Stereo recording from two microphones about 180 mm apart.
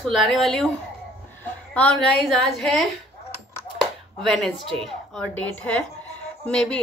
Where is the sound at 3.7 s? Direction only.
Centre (ahead or behind).